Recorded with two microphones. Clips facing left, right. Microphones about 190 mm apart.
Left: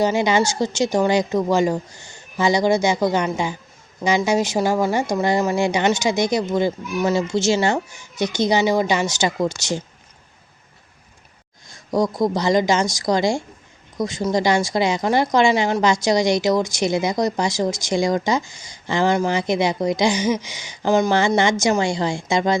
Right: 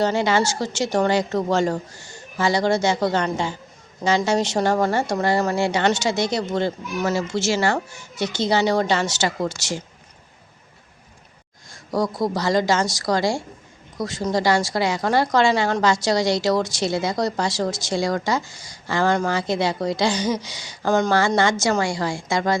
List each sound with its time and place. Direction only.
0.0 s a woman's voice: 15° left (ahead or behind)
11.9 s a woman's voice: 20° left (ahead or behind)